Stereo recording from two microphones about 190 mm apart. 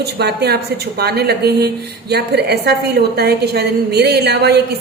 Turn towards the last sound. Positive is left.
turn(degrees=-60)  # may be behind; listen again after turning